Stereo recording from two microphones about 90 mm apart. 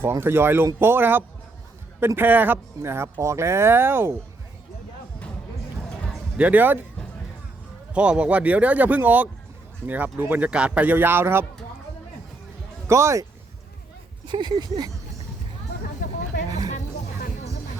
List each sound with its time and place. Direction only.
0.0 s speech: 25° right (ahead or behind)
6.3 s speech: 15° right (ahead or behind)
7.9 s speech: 15° right (ahead or behind)
12.9 s speech: 35° right (ahead or behind)
14.3 s speech: 60° right (ahead or behind)
16.5 s a sound: 45° right (ahead or behind)